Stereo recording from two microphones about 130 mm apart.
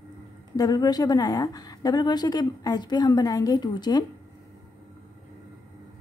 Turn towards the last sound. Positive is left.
turn(degrees=30)  # may be behind; listen again after turning